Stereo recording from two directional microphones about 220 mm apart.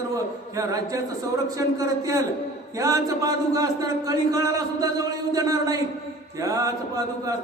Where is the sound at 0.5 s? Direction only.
15° right (ahead or behind).